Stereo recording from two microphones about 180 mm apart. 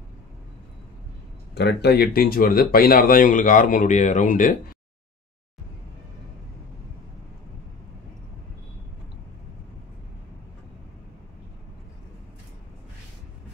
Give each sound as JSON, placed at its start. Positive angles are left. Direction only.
{"t": 1.5, "sound": "speech", "side_deg": 70}